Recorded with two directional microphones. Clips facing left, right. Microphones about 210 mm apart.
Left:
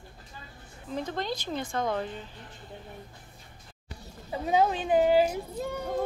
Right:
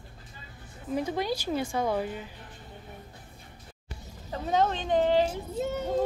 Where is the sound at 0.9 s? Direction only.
10° right (ahead or behind).